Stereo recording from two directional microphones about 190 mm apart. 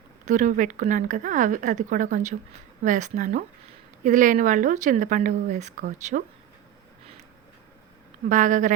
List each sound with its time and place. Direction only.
0.3 s speech: 40° right (ahead or behind)
8.3 s a woman's voice: 40° right (ahead or behind)